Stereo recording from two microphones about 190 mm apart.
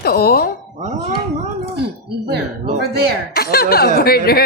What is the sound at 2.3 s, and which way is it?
Speech, 55° right (ahead or behind).